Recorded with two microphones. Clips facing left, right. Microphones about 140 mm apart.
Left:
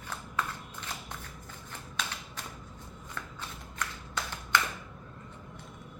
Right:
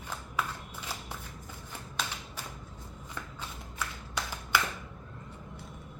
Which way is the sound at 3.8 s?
5° right (ahead or behind).